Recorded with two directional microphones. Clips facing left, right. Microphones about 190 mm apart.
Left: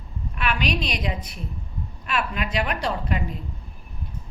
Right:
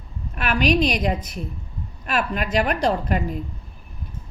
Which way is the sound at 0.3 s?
45° right (ahead or behind).